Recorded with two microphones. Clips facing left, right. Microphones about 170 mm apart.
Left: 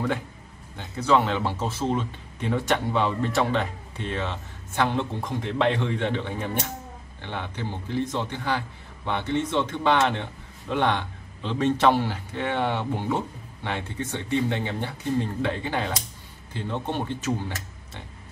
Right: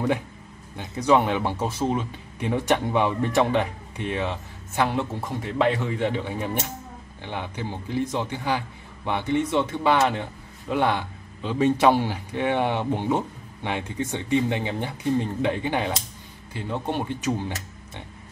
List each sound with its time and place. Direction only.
0.7 s speech: 15° right (ahead or behind)